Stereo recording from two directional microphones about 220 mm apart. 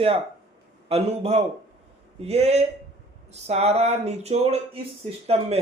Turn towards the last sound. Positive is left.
turn(degrees=-25)  # may be behind; listen again after turning